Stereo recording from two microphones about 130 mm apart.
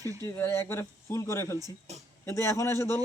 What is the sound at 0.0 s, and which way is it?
Speech, 25° right (ahead or behind).